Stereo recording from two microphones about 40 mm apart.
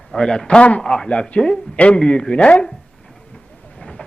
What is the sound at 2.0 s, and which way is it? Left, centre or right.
Speech, left.